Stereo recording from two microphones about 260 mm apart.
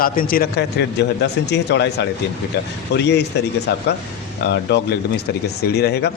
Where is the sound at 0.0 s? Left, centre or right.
Left.